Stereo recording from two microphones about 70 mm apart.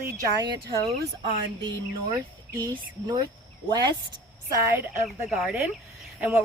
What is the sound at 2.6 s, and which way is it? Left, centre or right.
Speech, right.